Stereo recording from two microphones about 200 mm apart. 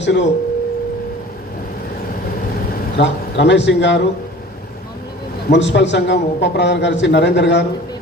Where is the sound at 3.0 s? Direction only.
60° left (ahead or behind).